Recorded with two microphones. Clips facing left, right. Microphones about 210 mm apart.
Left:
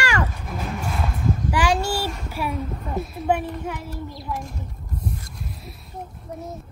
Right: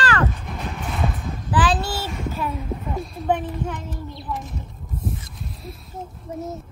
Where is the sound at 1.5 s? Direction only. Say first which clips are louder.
Right 2 dB; 10° left (ahead or behind).